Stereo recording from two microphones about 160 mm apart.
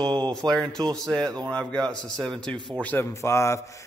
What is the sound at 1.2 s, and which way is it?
Speech, 25° right (ahead or behind).